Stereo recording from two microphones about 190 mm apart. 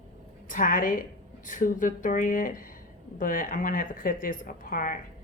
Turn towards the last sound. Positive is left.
turn(degrees=50)  # may be behind; listen again after turning